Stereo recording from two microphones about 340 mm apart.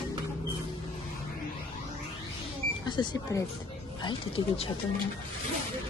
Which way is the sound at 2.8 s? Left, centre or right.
Centre.